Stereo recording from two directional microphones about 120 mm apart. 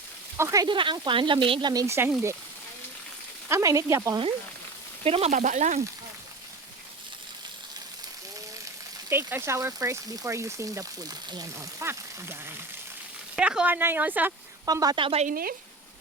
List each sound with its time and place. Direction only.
0.3 s speech: 25° right (ahead or behind)
0.7 s speech: 45° right (ahead or behind)
1.7 s speech: 30° right (ahead or behind)
3.5 s speech: 25° right (ahead or behind)
5.0 s speech: 60° right (ahead or behind); by 5.8 s 80° right
9.0 s speech: 20° right (ahead or behind)
11.9 s speech: 20° right (ahead or behind)
13.3 s speech: 5° right (ahead or behind)
14.6 s speech: 30° right (ahead or behind)
14.9 s speech: 45° right (ahead or behind)